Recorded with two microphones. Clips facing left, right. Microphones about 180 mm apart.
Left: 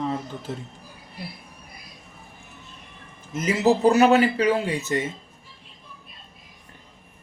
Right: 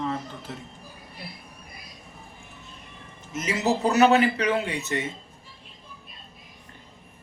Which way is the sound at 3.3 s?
30° left (ahead or behind).